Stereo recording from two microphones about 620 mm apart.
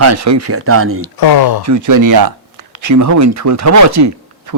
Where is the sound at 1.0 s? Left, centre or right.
Left.